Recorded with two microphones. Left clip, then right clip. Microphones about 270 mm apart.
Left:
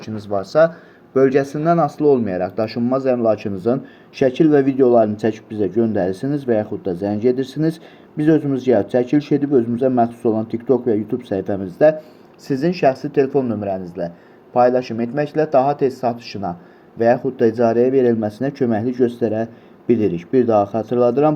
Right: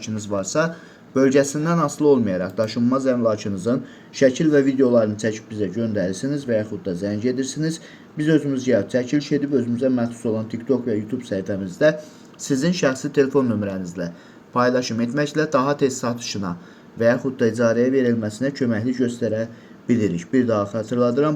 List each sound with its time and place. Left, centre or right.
0.0 s speech: centre